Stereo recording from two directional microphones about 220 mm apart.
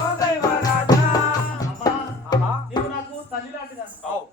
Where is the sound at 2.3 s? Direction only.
20° left (ahead or behind).